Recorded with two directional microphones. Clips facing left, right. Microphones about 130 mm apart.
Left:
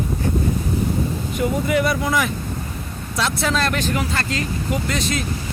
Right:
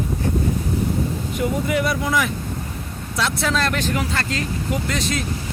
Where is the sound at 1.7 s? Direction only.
40° left (ahead or behind).